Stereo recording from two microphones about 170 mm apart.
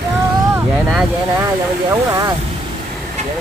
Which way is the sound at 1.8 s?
20° right (ahead or behind).